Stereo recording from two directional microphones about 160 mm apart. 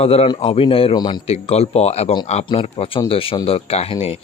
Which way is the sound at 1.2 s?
40° left (ahead or behind).